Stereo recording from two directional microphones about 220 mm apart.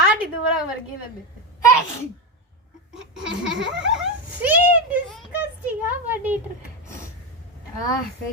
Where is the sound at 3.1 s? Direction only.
5° right (ahead or behind).